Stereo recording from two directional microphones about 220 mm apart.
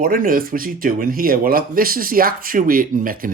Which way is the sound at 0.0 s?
40° right (ahead or behind).